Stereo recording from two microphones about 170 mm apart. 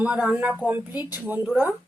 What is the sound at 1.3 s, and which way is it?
Speech, 10° right (ahead or behind).